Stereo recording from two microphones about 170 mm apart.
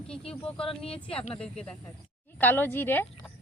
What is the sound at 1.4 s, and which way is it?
A woman's voice, 5° left (ahead or behind).